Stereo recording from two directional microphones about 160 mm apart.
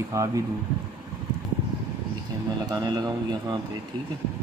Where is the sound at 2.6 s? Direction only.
25° right (ahead or behind).